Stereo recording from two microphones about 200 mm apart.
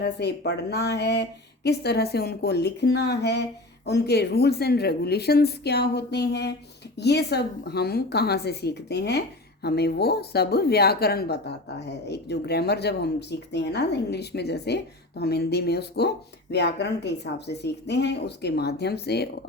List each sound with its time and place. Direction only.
0.0 s a woman's voice: 55° left (ahead or behind)